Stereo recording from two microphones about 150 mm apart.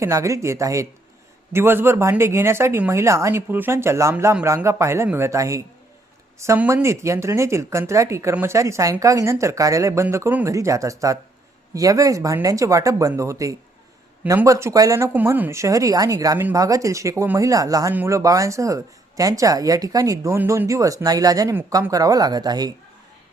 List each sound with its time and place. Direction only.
0.0 s a woman's voice: 20° right (ahead or behind)